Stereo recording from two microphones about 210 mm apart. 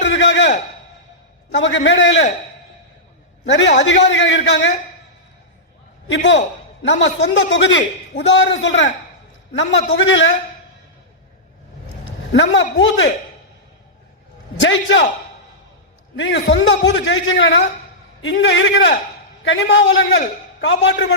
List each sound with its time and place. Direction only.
0.0 s a sound: 60° left (ahead or behind)
1.5 s a man's voice: 60° left (ahead or behind)
3.4 s a man's voice: 60° left (ahead or behind)
6.1 s a man's voice: 60° left (ahead or behind)
9.9 s a man's voice: 65° left (ahead or behind)
12.3 s a man's voice: 60° left (ahead or behind)
14.6 s a man's voice: 65° left (ahead or behind)
16.1 s a man's voice: 60° left (ahead or behind)